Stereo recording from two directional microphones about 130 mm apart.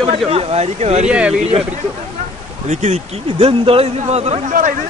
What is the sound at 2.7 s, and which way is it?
A man's voice, 60° right (ahead or behind).